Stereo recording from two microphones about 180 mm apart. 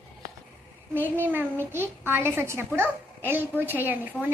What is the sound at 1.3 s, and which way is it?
A child's voice, 10° right (ahead or behind).